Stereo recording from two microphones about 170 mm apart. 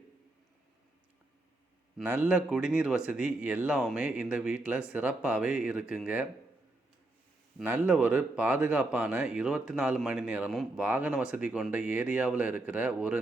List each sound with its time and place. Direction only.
2.0 s speech: 10° right (ahead or behind)
7.6 s speech: 10° right (ahead or behind)